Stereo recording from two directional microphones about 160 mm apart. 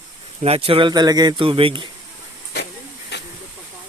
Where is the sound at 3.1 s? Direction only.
90° left.